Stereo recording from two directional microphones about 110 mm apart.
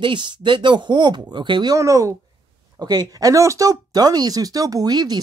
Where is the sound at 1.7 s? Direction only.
30° right (ahead or behind).